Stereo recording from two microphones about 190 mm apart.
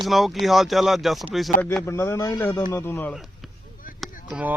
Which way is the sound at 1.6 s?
10° left (ahead or behind).